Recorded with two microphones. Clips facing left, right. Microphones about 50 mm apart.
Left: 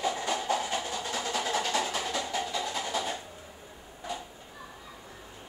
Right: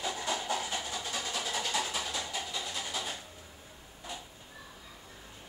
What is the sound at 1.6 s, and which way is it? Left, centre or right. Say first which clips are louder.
Percussion: left 4 dB; left.